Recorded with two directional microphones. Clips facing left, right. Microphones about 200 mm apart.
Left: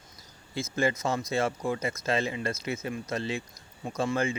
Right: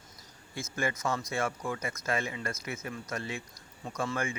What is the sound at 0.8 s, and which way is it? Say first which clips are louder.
Speech: left 4 dB; 30° left (ahead or behind).